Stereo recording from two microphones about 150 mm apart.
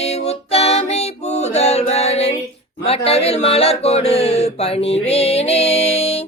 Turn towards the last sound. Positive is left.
turn(degrees=45)  # may be behind; listen again after turning